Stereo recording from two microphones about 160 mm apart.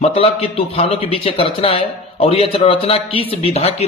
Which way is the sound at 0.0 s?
35° left (ahead or behind).